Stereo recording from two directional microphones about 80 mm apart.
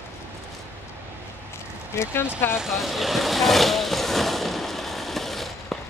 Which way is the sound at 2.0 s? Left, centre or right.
Left.